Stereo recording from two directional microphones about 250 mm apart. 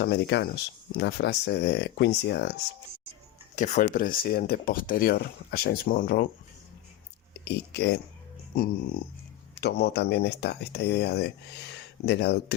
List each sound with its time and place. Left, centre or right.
0.0 s speech: left
3.5 s speech: left
7.3 s speech: left
9.6 s speech: left